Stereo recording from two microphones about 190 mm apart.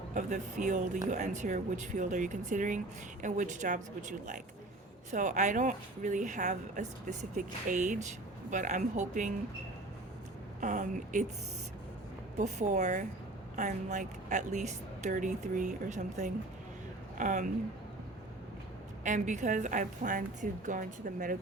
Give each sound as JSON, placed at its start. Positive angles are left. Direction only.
{"t": 0.1, "sound": "speech", "side_deg": -40}
{"t": 10.6, "sound": "speech", "side_deg": -40}
{"t": 12.4, "sound": "speech", "side_deg": -40}
{"t": 19.0, "sound": "speech", "side_deg": -40}